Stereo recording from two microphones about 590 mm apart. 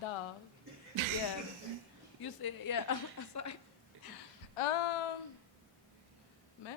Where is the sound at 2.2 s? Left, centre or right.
Left.